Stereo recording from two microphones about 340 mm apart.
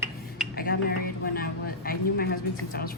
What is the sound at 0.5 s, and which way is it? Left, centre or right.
Speech, left.